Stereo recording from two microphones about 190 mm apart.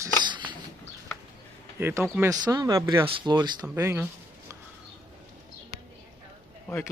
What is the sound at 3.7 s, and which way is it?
Speech, 10° right (ahead or behind).